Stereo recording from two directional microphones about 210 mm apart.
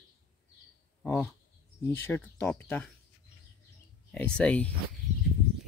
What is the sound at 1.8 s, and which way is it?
Speech, 10° left (ahead or behind).